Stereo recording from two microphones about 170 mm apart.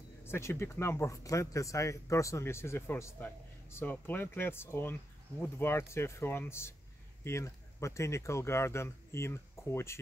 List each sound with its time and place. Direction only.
0.2 s speech: 15° left (ahead or behind)